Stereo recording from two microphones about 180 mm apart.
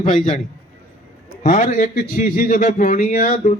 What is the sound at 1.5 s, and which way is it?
Speech, 45° left (ahead or behind).